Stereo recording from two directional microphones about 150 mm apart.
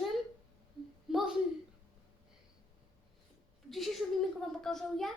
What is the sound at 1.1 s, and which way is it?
Speech, centre (ahead or behind).